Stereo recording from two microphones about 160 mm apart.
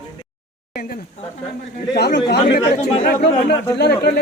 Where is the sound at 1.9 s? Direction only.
90° left.